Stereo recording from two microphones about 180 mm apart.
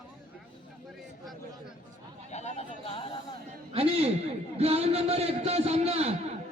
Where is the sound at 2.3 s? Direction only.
40° left (ahead or behind).